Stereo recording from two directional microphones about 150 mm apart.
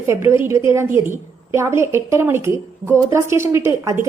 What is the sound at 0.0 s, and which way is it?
A woman's voice, 15° right (ahead or behind).